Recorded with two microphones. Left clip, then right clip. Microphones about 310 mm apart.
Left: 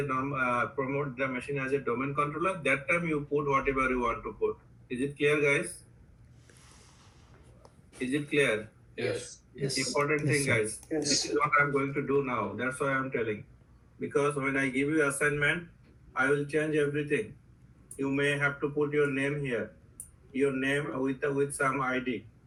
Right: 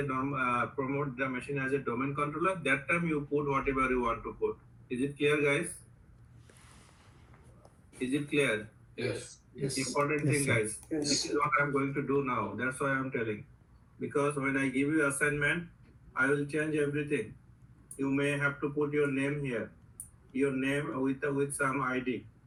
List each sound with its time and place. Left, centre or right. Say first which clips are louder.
0.1 s speech: left 2 dB; left
7.9 s speech: left 2 dB; left